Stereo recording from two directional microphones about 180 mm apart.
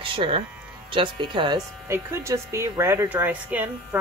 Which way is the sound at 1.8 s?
15° right (ahead or behind).